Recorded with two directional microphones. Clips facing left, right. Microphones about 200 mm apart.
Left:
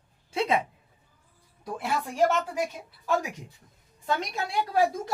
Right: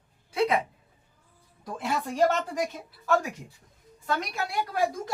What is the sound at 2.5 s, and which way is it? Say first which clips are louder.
Speech: even; 10° left (ahead or behind).